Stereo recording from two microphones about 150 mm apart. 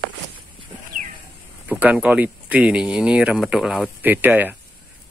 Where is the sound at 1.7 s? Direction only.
10° right (ahead or behind).